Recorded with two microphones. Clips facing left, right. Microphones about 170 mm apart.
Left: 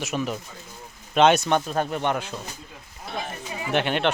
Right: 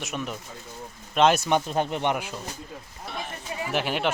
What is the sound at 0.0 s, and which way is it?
Speech, centre (ahead or behind).